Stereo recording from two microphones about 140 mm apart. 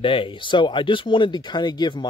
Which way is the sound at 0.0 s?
40° left (ahead or behind).